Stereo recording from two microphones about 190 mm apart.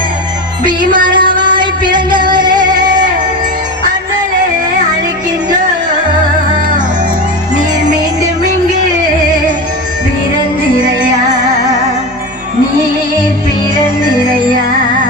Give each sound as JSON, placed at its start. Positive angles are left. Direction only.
{"t": 0.6, "sound": "music", "side_deg": -25}